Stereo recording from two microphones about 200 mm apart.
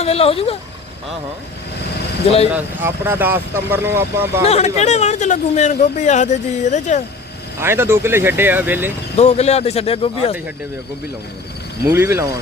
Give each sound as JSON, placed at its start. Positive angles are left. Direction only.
{"t": 0.0, "sound": "speech", "side_deg": 30}
{"t": 2.5, "sound": "speech", "side_deg": -10}
{"t": 4.4, "sound": "speech", "side_deg": 35}
{"t": 7.6, "sound": "speech", "side_deg": -10}
{"t": 9.1, "sound": "speech", "side_deg": 30}
{"t": 11.9, "sound": "speech", "side_deg": -15}